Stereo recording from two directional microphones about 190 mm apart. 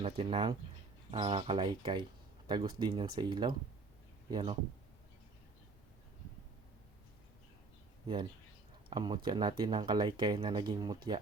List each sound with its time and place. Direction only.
0.0 s speech: 30° right (ahead or behind)
8.0 s speech: 25° right (ahead or behind)